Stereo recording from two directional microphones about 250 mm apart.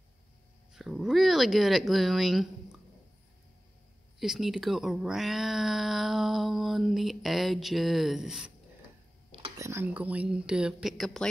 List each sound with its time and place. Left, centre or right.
0.7 s speech: centre
4.2 s speech: centre
9.3 s a sound: right
9.7 s speech: centre